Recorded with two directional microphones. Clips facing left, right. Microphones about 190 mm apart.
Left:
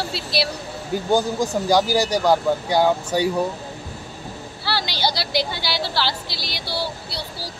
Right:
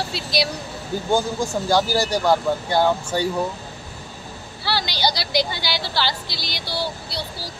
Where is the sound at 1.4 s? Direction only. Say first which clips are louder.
Left 2 dB; 15° left (ahead or behind).